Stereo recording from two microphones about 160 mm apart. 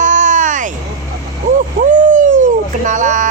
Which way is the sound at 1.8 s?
50° right (ahead or behind).